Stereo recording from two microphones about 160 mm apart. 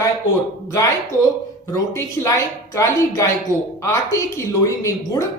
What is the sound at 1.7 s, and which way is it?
A woman's voice, 20° left (ahead or behind).